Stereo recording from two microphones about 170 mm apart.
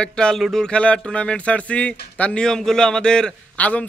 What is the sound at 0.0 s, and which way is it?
A man's voice, 5° left (ahead or behind).